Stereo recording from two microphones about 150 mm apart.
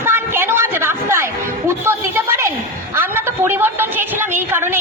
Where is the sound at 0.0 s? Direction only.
15° right (ahead or behind).